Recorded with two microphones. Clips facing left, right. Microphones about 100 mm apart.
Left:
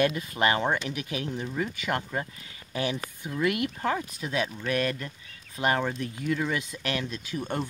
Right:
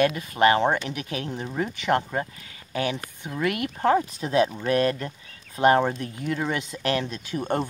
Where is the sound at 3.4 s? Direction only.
35° right (ahead or behind).